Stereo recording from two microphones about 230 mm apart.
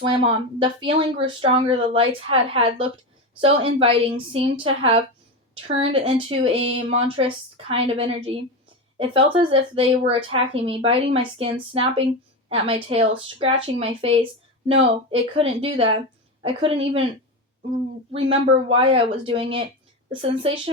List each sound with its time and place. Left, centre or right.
0.0 s speech: right
18.1 s speech: right